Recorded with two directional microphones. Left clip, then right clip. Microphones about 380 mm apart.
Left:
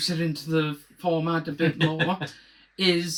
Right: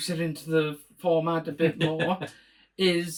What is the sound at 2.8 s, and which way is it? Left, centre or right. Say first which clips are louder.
Speech: left 1 dB; centre.